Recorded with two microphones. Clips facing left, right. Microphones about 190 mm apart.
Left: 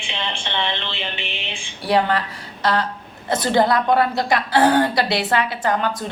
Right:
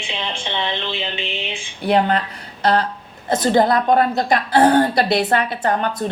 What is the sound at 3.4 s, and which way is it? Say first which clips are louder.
Speech: right 2 dB; 45° right (ahead or behind).